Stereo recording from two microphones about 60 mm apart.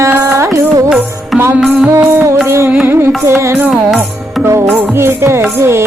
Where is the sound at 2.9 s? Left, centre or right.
Right.